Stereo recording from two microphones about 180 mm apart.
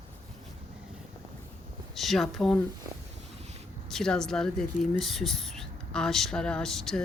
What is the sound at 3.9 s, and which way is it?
Speech, 5° left (ahead or behind).